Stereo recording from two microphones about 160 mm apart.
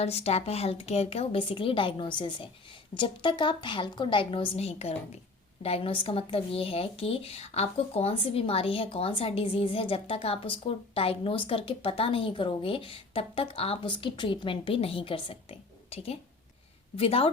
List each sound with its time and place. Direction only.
0.0 s speech: 40° left (ahead or behind)